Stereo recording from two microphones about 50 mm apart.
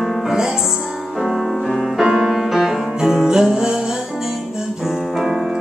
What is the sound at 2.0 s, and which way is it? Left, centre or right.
Music, centre.